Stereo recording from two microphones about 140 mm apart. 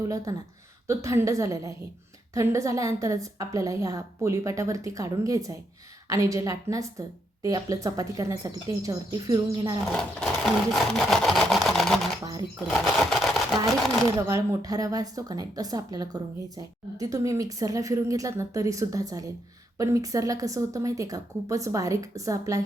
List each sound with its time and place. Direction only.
0.3 s a woman's voice: 25° right (ahead or behind)
9.8 s sewing machine: 5° left (ahead or behind)
12.2 s a woman's voice: 25° right (ahead or behind)
12.7 s a sound: centre (ahead or behind)
14.2 s a woman's voice: 25° right (ahead or behind)